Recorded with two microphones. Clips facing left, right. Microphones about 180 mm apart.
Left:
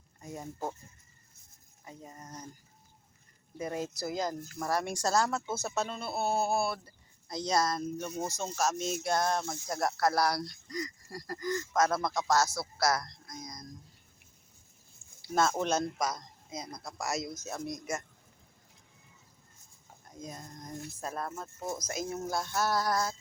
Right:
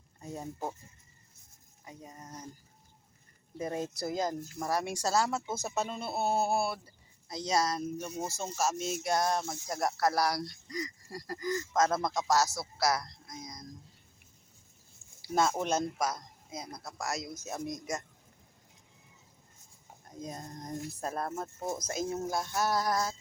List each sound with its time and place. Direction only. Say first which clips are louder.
0.4 s speech: left 1 dB; 10° right (ahead or behind)
1.8 s speech: even; 15° right (ahead or behind)
3.6 s speech: right 1 dB; 25° right (ahead or behind)
4.7 s speech: left 1 dB; 10° right (ahead or behind)
15.2 s speech: even; 10° right (ahead or behind)
17.3 s speech: even; 10° right (ahead or behind)
20.1 s speech: right 3 dB; 35° right (ahead or behind)
21.8 s speech: right 4 dB; 30° right (ahead or behind)
22.3 s speech: left 2 dB; 15° right (ahead or behind)